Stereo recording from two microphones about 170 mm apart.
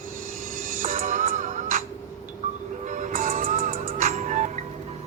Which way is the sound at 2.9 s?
50° right (ahead or behind).